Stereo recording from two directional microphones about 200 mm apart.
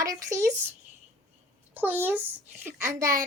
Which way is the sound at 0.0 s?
15° right (ahead or behind).